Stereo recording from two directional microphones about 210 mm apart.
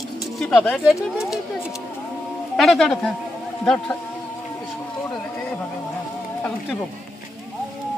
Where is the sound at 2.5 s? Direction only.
Centre (ahead or behind).